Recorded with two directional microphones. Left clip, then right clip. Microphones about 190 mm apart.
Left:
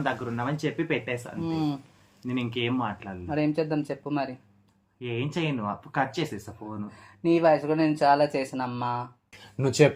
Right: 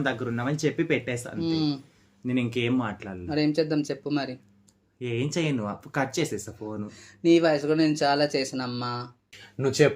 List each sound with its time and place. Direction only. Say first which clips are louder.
0.0 s speech: right 1 dB; 65° right (ahead or behind)
1.4 s speech: right 4 dB; 35° right (ahead or behind)
2.2 s speech: right 2 dB; 65° right (ahead or behind)
3.2 s speech: right 2 dB; 35° right (ahead or behind)
4.9 s speech: right 2 dB; 60° right (ahead or behind)
6.8 s speech: right 4 dB; 35° right (ahead or behind)
9.6 s speech: even; 15° left (ahead or behind)